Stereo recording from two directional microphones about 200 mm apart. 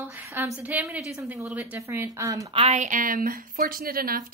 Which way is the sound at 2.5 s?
30° right (ahead or behind).